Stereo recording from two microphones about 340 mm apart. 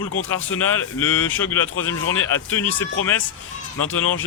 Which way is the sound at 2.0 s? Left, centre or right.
Left.